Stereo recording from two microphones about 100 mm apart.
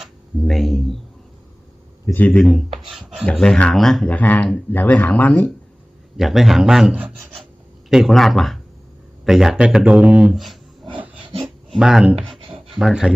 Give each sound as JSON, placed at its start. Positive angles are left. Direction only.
{"t": 0.0, "sound": "speech", "side_deg": 0}
{"t": 2.1, "sound": "speech", "side_deg": 15}
{"t": 2.4, "sound": "speech", "side_deg": 0}
{"t": 2.9, "sound": "a sound", "side_deg": 0}
{"t": 3.3, "sound": "speech", "side_deg": 5}
{"t": 6.1, "sound": "speech", "side_deg": 0}
{"t": 10.3, "sound": "speech", "side_deg": 0}
{"t": 11.4, "sound": "a sound", "side_deg": -5}
{"t": 12.4, "sound": "a sound", "side_deg": -65}
{"t": 12.7, "sound": "speech", "side_deg": -5}